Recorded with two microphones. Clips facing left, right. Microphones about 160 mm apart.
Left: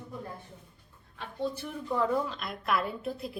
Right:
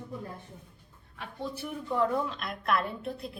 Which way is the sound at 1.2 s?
5° right (ahead or behind).